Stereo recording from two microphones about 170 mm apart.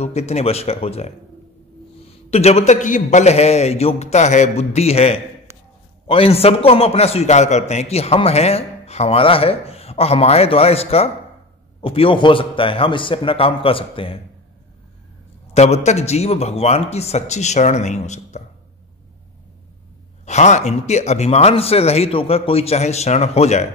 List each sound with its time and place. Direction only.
0.0 s a man's voice: 40° left (ahead or behind)
2.3 s a man's voice: 40° left (ahead or behind)
15.4 s a man's voice: 40° left (ahead or behind)
20.2 s a man's voice: 45° left (ahead or behind)